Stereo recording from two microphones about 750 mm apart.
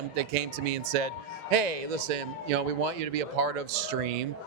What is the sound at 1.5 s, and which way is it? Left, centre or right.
A man's voice, right.